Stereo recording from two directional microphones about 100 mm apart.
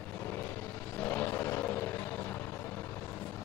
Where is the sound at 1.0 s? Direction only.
20° left (ahead or behind).